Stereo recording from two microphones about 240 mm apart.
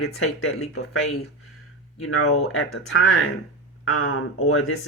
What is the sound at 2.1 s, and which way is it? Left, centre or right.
Speech, left.